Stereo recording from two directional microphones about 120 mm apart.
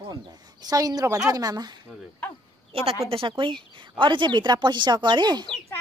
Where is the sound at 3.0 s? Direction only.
45° right (ahead or behind).